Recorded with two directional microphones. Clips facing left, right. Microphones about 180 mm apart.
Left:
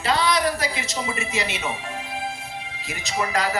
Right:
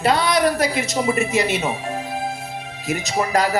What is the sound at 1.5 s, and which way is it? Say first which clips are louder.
Music: right 7 dB; 40° right (ahead or behind).